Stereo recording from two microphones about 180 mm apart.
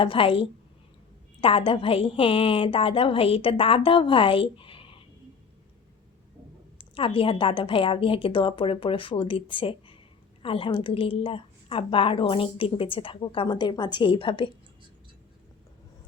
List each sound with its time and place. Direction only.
0.0 s a woman's voice: 30° left (ahead or behind)
6.7 s a woman's voice: 30° left (ahead or behind)